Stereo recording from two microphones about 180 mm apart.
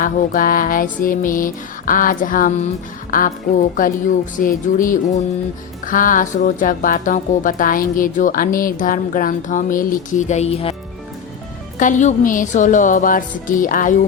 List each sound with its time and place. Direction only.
0.0 s speech: 50° left (ahead or behind); by 10.8 s 35° left (ahead or behind)
11.8 s speech: 45° left (ahead or behind)